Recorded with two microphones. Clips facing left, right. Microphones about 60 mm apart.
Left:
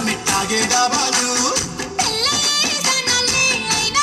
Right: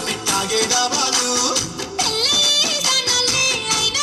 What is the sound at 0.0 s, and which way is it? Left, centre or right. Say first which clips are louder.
Music: left 2 dB; left.